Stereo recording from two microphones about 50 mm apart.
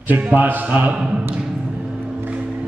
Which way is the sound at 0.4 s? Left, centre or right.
Right.